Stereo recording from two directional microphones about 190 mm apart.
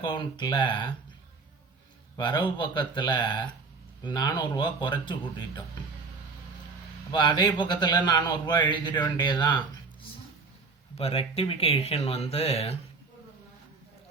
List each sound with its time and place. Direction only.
0.0 s speech: 25° left (ahead or behind)
2.1 s speech: 25° left (ahead or behind)
7.1 s speech: 25° left (ahead or behind)
10.9 s speech: 30° left (ahead or behind)